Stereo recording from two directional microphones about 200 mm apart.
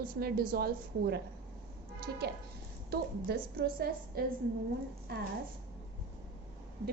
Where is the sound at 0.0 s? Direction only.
50° right (ahead or behind).